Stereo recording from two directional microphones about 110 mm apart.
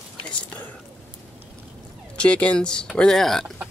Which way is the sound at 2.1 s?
10° left (ahead or behind).